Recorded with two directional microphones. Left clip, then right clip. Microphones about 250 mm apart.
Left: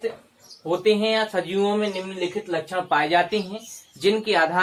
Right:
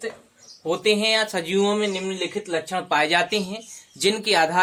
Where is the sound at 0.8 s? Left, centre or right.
Right.